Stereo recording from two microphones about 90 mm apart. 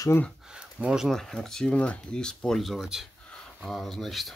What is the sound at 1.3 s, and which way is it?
Speech, 5° left (ahead or behind).